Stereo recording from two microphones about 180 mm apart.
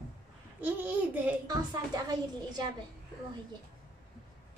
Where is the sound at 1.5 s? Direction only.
20° right (ahead or behind).